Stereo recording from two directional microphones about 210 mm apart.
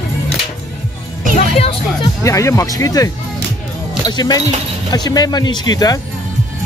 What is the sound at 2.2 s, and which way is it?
Speech, 15° left (ahead or behind).